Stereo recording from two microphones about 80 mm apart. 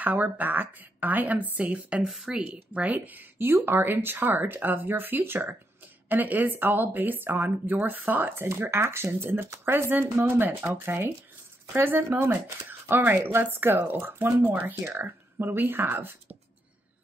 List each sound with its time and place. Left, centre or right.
0.0 s speech: right